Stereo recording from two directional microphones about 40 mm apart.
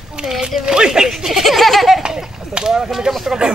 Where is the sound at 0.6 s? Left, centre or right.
Centre.